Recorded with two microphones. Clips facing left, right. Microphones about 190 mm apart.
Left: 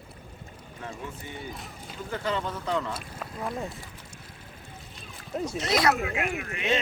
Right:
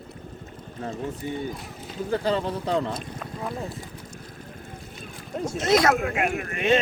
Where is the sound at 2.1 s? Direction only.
35° right (ahead or behind).